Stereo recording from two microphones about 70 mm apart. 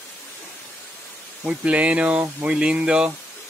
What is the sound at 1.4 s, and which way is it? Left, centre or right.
Speech, right.